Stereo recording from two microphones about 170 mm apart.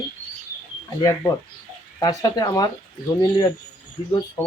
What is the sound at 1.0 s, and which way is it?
Speech, 20° left (ahead or behind).